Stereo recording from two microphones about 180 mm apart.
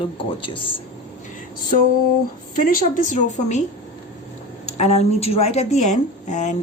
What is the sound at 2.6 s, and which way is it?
Speech, 45° left (ahead or behind).